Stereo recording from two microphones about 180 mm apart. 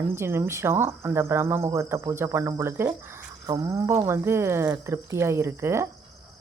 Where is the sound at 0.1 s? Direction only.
15° right (ahead or behind).